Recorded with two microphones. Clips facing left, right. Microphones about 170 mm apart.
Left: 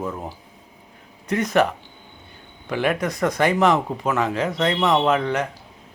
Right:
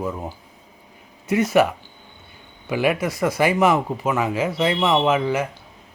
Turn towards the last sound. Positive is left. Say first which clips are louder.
# right 1 dB
turn(degrees=-5)  # may be behind; listen again after turning